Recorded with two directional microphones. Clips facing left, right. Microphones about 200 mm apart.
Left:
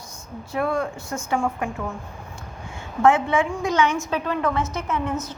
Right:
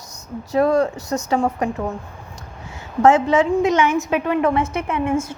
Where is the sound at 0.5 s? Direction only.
40° right (ahead or behind).